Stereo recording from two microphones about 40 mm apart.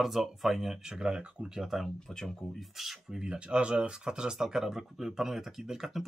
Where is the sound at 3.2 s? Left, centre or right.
Right.